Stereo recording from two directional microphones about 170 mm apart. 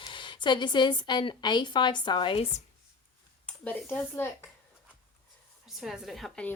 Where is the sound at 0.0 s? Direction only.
30° left (ahead or behind).